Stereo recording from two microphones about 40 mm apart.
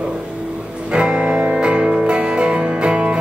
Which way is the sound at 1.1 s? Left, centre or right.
Right.